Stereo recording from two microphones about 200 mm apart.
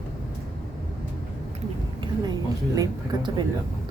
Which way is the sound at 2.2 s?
20° right (ahead or behind).